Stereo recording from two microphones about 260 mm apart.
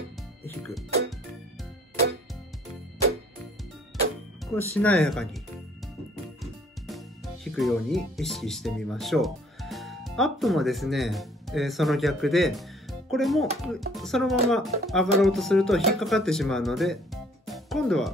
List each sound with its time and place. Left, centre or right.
4.6 s speech: centre
7.5 s speech: centre